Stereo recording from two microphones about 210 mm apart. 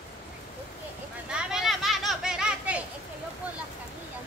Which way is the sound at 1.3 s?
Centre (ahead or behind).